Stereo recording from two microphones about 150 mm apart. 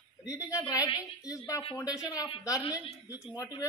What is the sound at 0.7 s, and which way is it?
A woman's voice, 25° left (ahead or behind).